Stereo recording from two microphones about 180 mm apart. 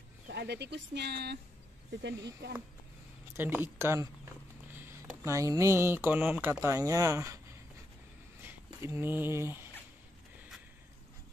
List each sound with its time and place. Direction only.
0.3 s speech: 70° right (ahead or behind)
1.9 s speech: 75° right (ahead or behind)
3.3 s speech: 10° right (ahead or behind)
8.4 s a sound: 15° right (ahead or behind)